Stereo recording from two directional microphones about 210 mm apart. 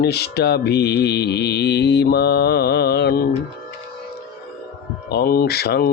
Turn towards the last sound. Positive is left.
turn(degrees=50)  # may be behind; listen again after turning